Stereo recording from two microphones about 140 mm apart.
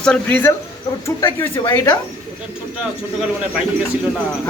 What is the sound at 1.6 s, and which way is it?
Speech, 30° left (ahead or behind).